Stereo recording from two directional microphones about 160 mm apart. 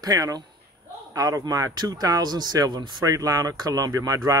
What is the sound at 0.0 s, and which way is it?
Speech, 20° right (ahead or behind).